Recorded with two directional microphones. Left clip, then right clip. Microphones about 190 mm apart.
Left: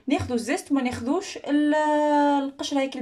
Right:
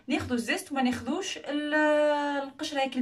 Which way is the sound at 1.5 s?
30° left (ahead or behind).